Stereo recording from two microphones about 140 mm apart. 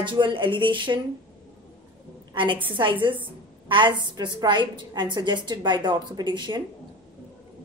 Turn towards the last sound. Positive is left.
turn(degrees=-35)  # may be behind; listen again after turning